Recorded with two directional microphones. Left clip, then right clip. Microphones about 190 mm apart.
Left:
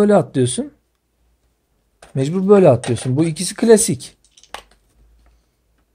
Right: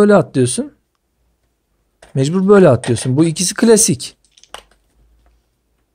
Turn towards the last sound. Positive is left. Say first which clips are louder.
# right 1 dB
turn(degrees=-20)  # may be behind; listen again after turning